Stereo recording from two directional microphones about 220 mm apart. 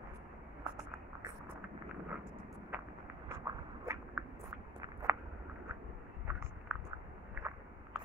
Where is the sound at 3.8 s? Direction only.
15° right (ahead or behind).